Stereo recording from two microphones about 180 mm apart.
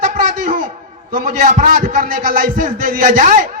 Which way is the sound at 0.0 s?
50° right (ahead or behind).